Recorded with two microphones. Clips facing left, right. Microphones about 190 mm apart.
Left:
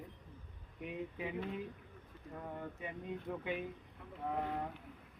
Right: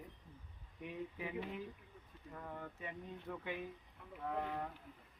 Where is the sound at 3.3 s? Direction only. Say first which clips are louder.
Left 4 dB; 20° left (ahead or behind).